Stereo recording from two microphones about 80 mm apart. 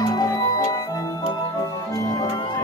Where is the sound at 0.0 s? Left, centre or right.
Left.